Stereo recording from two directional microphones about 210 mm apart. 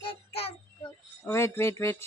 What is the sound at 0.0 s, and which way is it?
Child singing, 25° left (ahead or behind).